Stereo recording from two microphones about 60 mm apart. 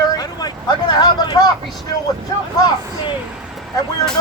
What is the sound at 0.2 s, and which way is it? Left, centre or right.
Vehicle, left.